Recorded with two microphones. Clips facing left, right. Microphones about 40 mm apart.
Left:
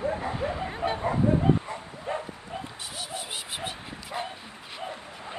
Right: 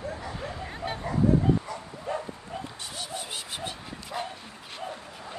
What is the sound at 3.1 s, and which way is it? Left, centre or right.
Dog, centre.